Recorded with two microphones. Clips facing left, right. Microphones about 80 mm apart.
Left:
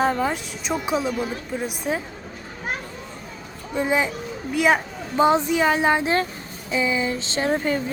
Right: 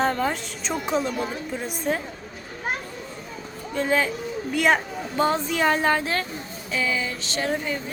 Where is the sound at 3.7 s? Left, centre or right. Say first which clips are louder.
Left 1 dB; centre.